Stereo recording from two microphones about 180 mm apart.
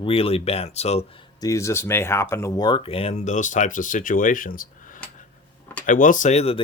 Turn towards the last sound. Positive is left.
turn(degrees=35)  # may be behind; listen again after turning